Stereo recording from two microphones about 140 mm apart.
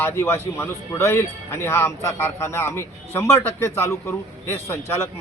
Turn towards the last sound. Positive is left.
turn(degrees=15)  # may be behind; listen again after turning